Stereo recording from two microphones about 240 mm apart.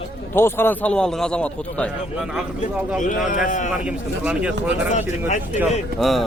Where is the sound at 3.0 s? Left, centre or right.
Left.